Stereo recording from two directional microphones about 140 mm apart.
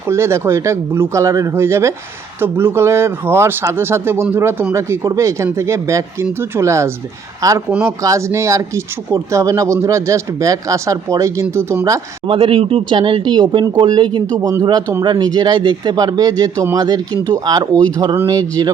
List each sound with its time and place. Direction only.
0.1 s speech: 20° right (ahead or behind)
12.3 s speech: 40° right (ahead or behind)
17.7 s speech: 10° left (ahead or behind)
18.3 s speech: 25° right (ahead or behind)